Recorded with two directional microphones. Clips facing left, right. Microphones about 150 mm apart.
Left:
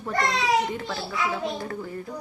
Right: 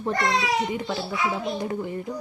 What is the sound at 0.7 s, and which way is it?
Speech, 15° right (ahead or behind).